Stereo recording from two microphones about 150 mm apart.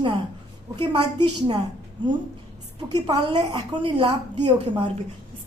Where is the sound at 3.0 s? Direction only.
30° right (ahead or behind).